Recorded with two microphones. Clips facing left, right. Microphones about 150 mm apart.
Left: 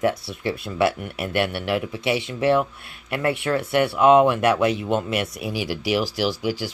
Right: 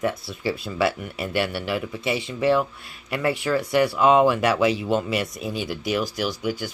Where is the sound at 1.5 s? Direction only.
65° left (ahead or behind).